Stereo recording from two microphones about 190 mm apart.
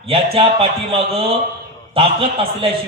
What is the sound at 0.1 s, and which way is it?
A man's voice, 30° right (ahead or behind).